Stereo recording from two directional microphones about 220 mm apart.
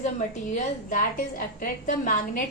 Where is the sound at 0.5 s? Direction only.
35° left (ahead or behind).